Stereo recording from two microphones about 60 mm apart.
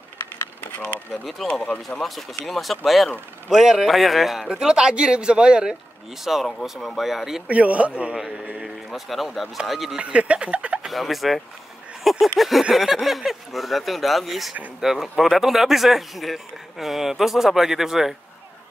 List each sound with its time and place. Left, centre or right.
0.7 s speech: left
1.1 s speech: centre
1.5 s speech: left
1.9 s speech: centre
6.3 s speech: centre
7.4 s speech: right
8.6 s speech: centre
9.9 s speech: centre
10.9 s speech: centre
12.0 s a sound: centre
12.4 s speech: centre